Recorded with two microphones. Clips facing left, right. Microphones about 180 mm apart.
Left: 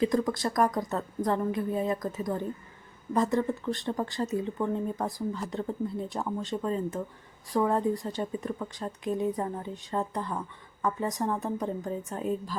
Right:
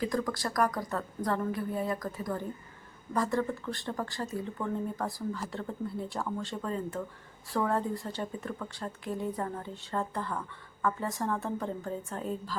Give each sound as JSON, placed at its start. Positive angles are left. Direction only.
{"t": 0.0, "sound": "a woman's voice", "side_deg": 20}